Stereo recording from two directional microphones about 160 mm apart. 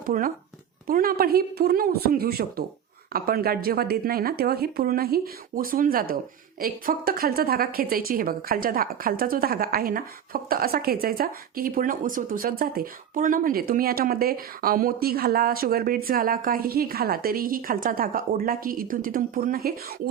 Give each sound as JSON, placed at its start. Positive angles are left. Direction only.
{"t": 0.0, "sound": "a woman's voice", "side_deg": -60}